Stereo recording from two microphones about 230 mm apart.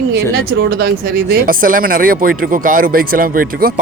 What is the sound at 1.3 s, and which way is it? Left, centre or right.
Speech, right.